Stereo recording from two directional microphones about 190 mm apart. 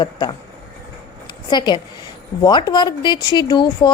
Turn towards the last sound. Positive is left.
turn(degrees=25)  # may be behind; listen again after turning